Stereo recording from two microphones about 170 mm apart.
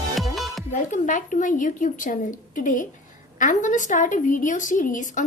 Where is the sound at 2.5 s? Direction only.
50° left (ahead or behind).